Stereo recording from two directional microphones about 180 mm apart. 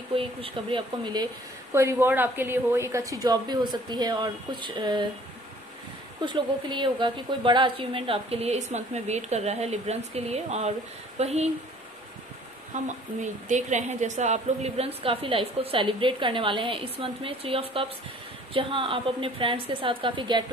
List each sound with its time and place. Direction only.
0.1 s a woman's voice: 30° right (ahead or behind)
6.2 s a woman's voice: 25° right (ahead or behind)
12.8 s a woman's voice: 40° right (ahead or behind); by 20.4 s 25° right (ahead or behind)